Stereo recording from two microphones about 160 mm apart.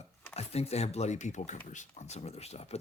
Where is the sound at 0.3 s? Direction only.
40° left (ahead or behind).